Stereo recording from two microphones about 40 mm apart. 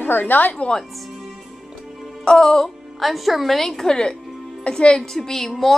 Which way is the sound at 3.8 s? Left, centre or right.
Left.